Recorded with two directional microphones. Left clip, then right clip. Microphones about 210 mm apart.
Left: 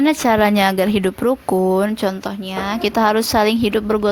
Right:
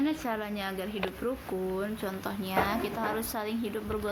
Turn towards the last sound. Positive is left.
turn(degrees=45)  # may be behind; listen again after turning